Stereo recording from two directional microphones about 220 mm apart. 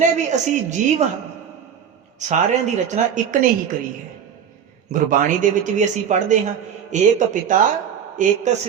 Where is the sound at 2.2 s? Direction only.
35° right (ahead or behind).